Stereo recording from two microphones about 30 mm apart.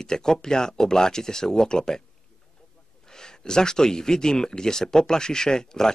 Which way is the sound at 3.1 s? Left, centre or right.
Left.